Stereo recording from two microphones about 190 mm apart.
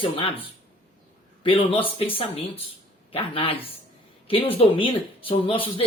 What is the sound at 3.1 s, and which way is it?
Speech, 30° left (ahead or behind).